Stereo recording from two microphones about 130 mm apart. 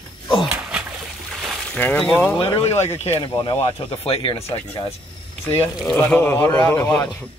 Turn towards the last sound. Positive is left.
turn(degrees=10)  # may be behind; listen again after turning